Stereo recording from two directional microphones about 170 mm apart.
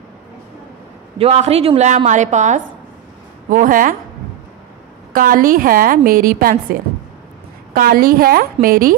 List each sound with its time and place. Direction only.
1.1 s a woman's voice: 40° right (ahead or behind)
5.1 s a woman's voice: 55° right (ahead or behind)